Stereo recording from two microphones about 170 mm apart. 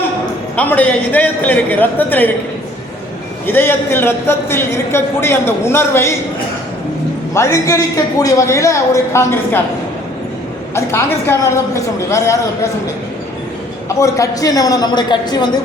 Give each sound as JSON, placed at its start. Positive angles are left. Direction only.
{"t": 0.5, "sound": "a man's voice", "side_deg": 10}
{"t": 3.4, "sound": "a man's voice", "side_deg": 15}
{"t": 7.3, "sound": "a man's voice", "side_deg": 15}
{"t": 10.8, "sound": "a man's voice", "side_deg": 15}
{"t": 13.8, "sound": "a man's voice", "side_deg": 20}